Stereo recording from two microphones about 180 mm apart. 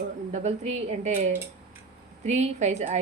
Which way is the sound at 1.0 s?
35° right (ahead or behind).